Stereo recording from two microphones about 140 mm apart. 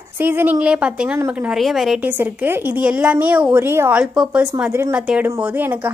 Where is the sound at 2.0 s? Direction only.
15° right (ahead or behind).